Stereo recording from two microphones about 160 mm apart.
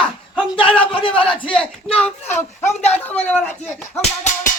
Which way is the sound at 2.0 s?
10° left (ahead or behind).